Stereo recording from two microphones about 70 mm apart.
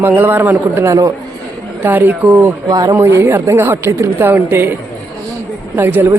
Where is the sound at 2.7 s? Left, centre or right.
Right.